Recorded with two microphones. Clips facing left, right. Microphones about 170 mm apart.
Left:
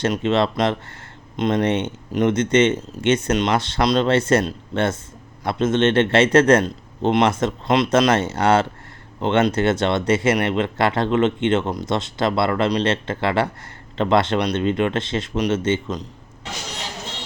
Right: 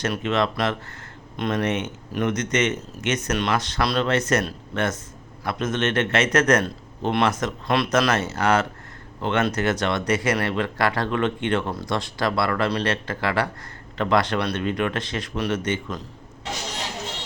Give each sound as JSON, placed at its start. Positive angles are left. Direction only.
{"t": 0.0, "sound": "speech", "side_deg": 25}